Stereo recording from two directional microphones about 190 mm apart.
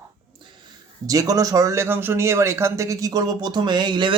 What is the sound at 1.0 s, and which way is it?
Speech, 20° right (ahead or behind).